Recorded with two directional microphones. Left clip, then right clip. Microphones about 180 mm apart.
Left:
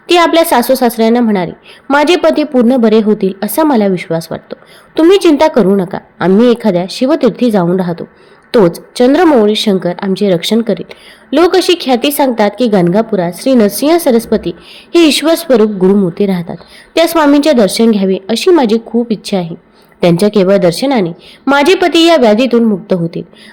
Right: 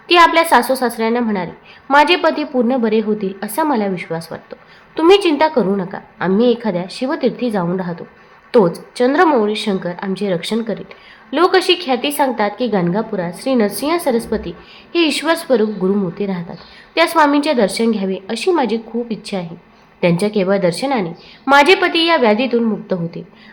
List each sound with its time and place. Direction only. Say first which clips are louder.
0.1 s a woman's voice: left 2 dB; 30° left (ahead or behind)